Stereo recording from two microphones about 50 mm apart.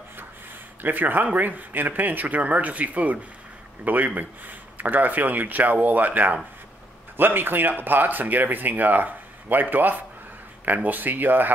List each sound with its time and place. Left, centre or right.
0.8 s speech: right